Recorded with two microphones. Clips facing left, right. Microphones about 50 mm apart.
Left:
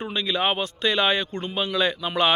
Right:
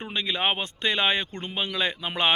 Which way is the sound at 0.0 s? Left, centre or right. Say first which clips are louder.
Left 2 dB; right.